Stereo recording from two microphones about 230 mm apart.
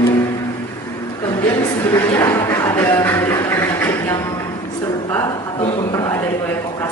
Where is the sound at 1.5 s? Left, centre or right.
Centre.